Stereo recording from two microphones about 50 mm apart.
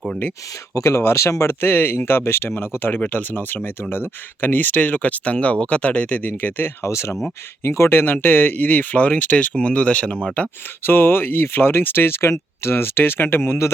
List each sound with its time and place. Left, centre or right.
0.8 s speech: left
1.6 s speech: left
3.1 s speech: left
6.8 s speech: left
7.6 s speech: left
10.8 s speech: left